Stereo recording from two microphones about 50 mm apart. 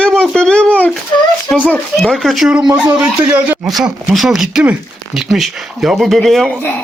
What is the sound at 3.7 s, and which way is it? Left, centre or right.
Speech, centre.